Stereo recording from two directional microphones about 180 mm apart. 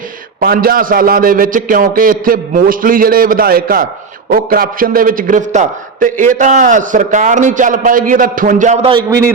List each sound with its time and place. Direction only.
0.3 s a man's voice: 55° right (ahead or behind)
8.9 s a man's voice: 20° right (ahead or behind)